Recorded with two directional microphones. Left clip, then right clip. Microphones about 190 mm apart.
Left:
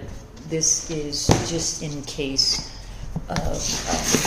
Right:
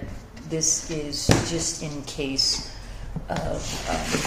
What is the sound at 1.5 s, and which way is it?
Speech, 10° left (ahead or behind).